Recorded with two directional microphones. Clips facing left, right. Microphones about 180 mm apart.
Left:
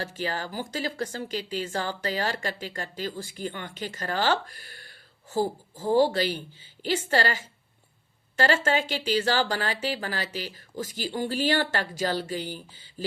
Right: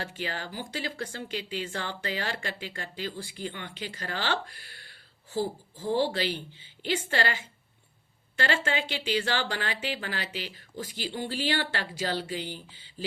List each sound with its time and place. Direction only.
0.0 s speech: 40° left (ahead or behind)